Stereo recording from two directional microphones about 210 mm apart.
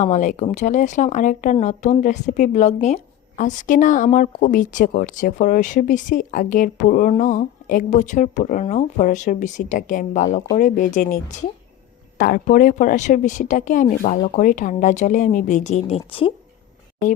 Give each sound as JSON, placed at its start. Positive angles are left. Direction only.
{"t": 0.0, "sound": "speech", "side_deg": 35}